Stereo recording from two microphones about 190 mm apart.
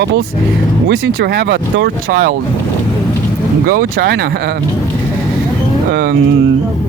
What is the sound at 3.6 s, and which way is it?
Speech, 50° right (ahead or behind).